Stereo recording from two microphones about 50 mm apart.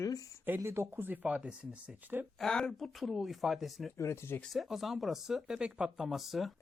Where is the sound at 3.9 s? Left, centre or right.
Left.